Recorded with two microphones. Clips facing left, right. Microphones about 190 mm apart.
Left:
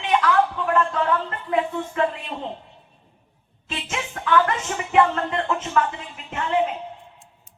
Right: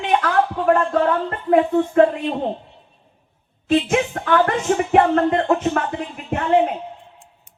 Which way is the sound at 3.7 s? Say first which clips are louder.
Right 13 dB; 50° right (ahead or behind).